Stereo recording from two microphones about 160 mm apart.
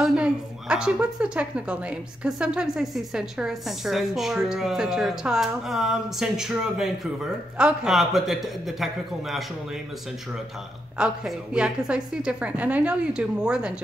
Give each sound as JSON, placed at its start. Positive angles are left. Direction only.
{"t": 0.0, "sound": "a woman's voice", "side_deg": -5}
{"t": 11.0, "sound": "a woman's voice", "side_deg": -5}